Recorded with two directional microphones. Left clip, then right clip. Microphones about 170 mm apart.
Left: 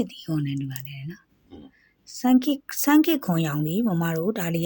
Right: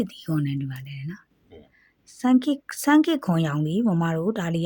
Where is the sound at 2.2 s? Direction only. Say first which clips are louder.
Even; 30° right (ahead or behind).